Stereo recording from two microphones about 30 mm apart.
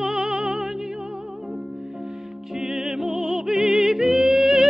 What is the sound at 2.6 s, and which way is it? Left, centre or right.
Music, right.